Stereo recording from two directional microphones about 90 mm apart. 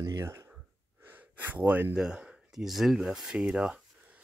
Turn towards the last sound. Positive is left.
turn(degrees=-10)  # may be behind; listen again after turning